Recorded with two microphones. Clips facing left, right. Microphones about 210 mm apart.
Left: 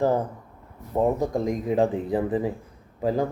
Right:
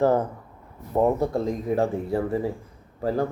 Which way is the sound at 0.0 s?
15° left (ahead or behind).